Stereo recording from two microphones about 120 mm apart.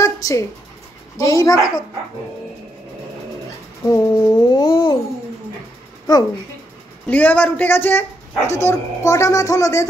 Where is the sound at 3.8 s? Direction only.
25° left (ahead or behind).